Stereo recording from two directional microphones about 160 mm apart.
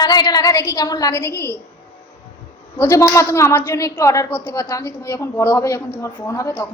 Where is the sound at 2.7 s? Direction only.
15° left (ahead or behind).